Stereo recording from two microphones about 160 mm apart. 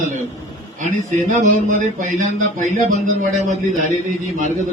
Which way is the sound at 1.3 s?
50° right (ahead or behind).